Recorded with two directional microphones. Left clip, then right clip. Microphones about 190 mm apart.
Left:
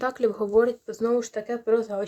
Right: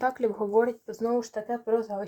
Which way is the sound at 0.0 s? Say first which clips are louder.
Left 2 dB; 10° left (ahead or behind).